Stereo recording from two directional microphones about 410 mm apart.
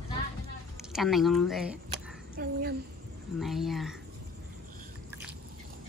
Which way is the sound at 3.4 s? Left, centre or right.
Centre.